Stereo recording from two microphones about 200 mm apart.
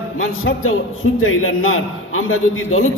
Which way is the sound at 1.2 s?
90° left.